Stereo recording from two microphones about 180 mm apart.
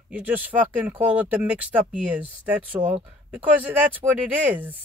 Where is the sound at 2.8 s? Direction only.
40° right (ahead or behind).